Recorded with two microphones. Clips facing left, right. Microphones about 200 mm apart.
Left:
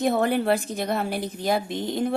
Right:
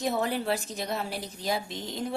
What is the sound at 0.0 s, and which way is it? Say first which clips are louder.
A woman's voice: left 6 dB; 55° left (ahead or behind).